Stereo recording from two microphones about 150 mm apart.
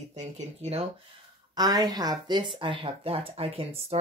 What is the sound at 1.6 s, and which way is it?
Speech, 25° right (ahead or behind).